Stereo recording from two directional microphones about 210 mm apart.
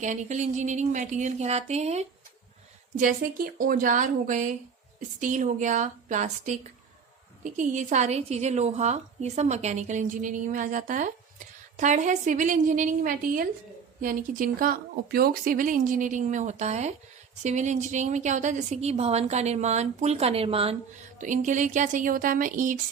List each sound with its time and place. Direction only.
0.0 s a woman's voice: 35° right (ahead or behind)
3.0 s a woman's voice: 40° right (ahead or behind)